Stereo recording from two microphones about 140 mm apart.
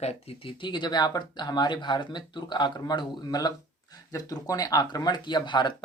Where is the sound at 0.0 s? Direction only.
45° left (ahead or behind).